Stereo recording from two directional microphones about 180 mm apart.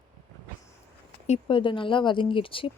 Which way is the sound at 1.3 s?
30° left (ahead or behind).